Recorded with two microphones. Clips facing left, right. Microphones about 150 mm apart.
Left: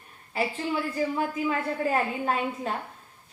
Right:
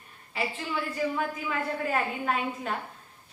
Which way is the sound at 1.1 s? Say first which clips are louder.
Left 3 dB; 30° left (ahead or behind).